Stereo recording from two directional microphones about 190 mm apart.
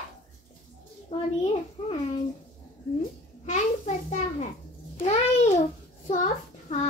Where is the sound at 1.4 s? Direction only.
30° left (ahead or behind).